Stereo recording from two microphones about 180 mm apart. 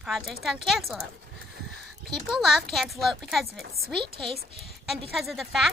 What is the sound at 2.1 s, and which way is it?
A child's voice, centre (ahead or behind).